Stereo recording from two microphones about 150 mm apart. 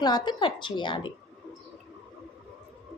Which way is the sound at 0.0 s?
30° left (ahead or behind).